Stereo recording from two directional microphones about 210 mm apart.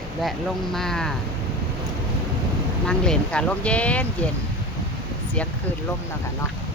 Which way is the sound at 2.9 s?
5° left (ahead or behind).